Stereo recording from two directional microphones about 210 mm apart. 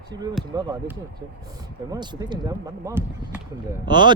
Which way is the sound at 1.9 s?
20° right (ahead or behind).